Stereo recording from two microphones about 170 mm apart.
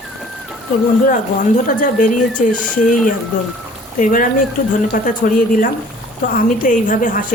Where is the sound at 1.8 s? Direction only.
50° left (ahead or behind).